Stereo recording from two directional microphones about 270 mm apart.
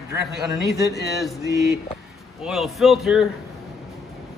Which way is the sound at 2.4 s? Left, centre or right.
Centre.